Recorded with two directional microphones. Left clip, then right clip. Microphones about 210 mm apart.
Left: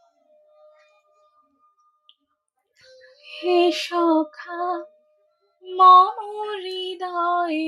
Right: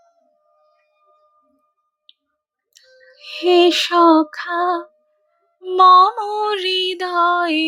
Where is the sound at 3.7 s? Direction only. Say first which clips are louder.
Right 8 dB; 20° right (ahead or behind).